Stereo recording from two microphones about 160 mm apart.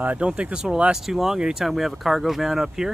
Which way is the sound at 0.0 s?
10° right (ahead or behind).